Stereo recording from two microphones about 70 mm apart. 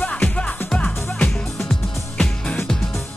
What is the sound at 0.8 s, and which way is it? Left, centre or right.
Music, left.